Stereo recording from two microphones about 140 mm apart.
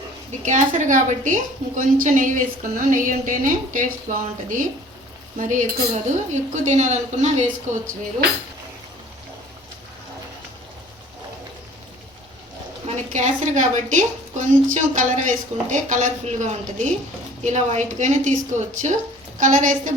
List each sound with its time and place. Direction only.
0.3 s a woman's voice: 60° right (ahead or behind)
13.1 s a woman's voice: 60° right (ahead or behind)